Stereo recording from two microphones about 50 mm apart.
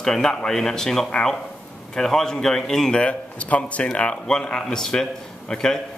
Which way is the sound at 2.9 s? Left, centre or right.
Left.